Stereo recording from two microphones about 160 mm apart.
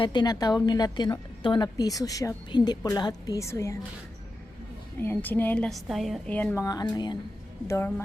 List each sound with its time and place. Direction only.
0.0 s a woman's voice: 25° left (ahead or behind)
4.9 s a woman's voice: 15° left (ahead or behind)
7.7 s a woman's voice: 15° left (ahead or behind)